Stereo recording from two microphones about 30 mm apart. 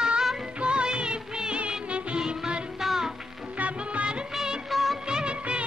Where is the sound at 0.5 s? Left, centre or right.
Right.